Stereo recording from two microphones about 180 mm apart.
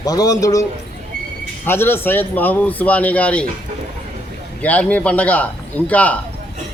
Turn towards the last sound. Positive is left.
turn(degrees=10)  # may be behind; listen again after turning